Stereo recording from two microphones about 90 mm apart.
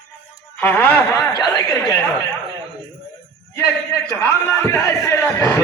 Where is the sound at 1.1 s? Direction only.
40° left (ahead or behind).